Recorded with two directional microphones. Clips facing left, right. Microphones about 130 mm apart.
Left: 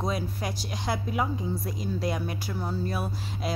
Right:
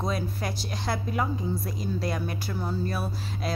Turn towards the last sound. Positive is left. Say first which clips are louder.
# even
turn(degrees=15)  # may be behind; listen again after turning